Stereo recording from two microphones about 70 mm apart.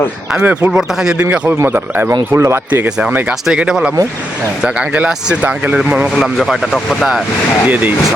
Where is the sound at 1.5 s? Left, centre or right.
Right.